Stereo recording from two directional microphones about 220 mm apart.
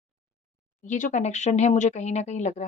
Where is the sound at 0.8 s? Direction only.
35° left (ahead or behind).